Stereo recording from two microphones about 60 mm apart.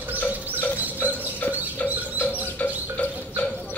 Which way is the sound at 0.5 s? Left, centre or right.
Right.